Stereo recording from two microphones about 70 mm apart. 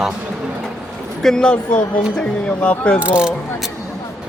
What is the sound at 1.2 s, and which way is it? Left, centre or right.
Speech, centre.